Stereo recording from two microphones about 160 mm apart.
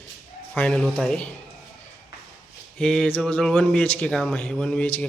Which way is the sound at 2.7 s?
5° left (ahead or behind).